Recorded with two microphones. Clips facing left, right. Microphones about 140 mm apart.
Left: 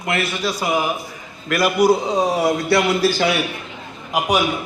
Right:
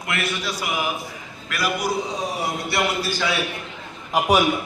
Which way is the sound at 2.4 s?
90° left.